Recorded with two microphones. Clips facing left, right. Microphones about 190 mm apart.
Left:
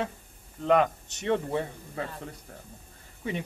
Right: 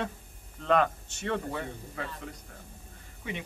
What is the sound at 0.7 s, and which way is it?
Speech, 15° left (ahead or behind).